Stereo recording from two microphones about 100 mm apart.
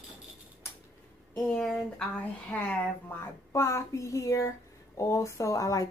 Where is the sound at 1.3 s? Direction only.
5° left (ahead or behind).